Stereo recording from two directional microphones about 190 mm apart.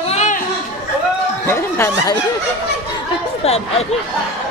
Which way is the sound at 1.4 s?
15° left (ahead or behind).